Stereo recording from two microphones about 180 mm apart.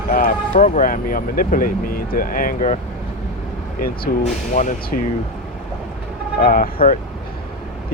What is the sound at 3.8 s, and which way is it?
Speech, 50° left (ahead or behind).